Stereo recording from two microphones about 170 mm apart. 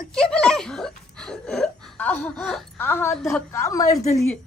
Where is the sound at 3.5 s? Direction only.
20° left (ahead or behind).